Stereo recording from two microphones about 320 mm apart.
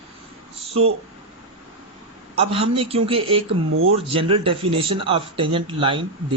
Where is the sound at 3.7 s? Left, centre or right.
Right.